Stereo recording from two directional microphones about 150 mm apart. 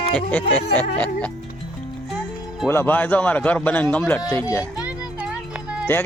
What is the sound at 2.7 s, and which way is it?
Speech, 15° left (ahead or behind).